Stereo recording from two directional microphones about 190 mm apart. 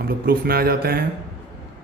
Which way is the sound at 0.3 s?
50° right (ahead or behind).